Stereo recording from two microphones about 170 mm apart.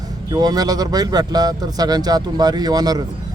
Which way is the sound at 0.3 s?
25° right (ahead or behind).